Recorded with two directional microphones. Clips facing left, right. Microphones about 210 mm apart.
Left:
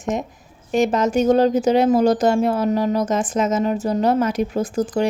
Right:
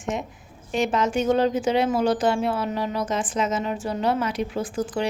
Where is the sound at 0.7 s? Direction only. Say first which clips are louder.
Left 5 dB; 40° left (ahead or behind).